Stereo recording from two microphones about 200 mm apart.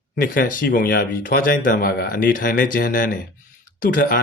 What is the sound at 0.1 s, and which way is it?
Speech, 45° left (ahead or behind).